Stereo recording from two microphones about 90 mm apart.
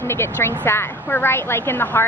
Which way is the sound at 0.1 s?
25° left (ahead or behind).